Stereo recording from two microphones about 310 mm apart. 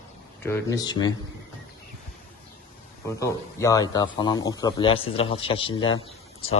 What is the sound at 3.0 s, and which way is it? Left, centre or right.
A man's voice, centre.